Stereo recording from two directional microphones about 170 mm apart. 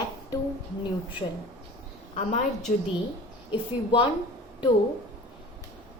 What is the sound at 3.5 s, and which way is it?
Speech, 30° left (ahead or behind).